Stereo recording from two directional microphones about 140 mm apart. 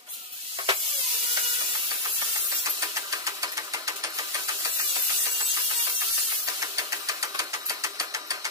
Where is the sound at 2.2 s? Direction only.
25° right (ahead or behind).